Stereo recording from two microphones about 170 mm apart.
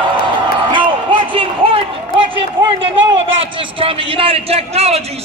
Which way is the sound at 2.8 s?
30° right (ahead or behind).